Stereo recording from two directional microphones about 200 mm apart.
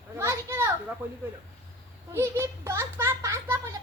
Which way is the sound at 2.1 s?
15° right (ahead or behind).